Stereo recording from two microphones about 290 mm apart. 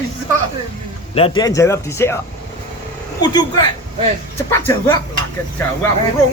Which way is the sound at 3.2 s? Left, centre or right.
Centre.